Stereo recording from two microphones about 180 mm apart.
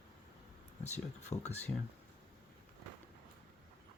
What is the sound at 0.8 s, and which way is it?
Speech, 40° left (ahead or behind).